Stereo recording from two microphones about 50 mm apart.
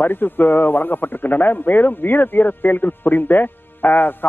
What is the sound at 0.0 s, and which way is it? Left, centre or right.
Speech, left.